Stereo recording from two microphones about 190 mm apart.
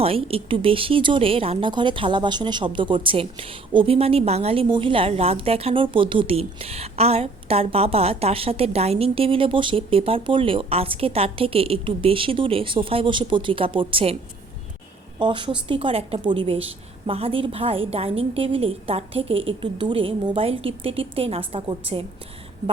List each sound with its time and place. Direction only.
0.0 s a woman's voice: 30° right (ahead or behind)
15.2 s a woman's voice: 25° right (ahead or behind)